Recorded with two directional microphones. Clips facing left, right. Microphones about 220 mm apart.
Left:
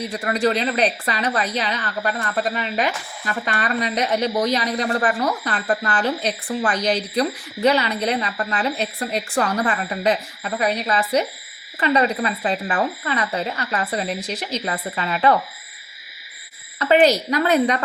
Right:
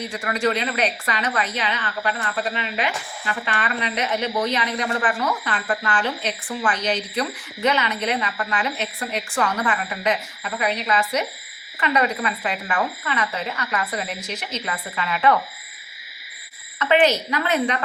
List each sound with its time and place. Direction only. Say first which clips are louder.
0.1 s speech: left 2 dB; 35° left (ahead or behind)
16.7 s speech: left 3 dB; 35° left (ahead or behind)